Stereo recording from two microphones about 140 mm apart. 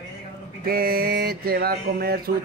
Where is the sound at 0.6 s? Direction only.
90° right.